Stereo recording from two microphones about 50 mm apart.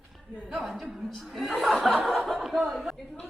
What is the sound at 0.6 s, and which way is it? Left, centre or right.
Speech, centre.